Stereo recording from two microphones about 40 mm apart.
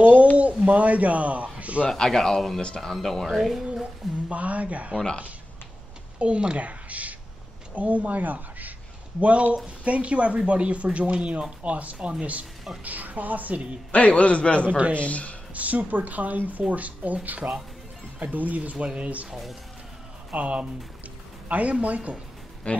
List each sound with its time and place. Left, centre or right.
0.0 s a sound: right
0.4 s speech: right
1.9 s speech: centre
3.3 s speech: centre
4.3 s speech: right
6.1 s a woman's voice: right
13.9 s a man's voice: left
15.5 s speech: right
20.3 s speech: right
22.7 s a man's voice: left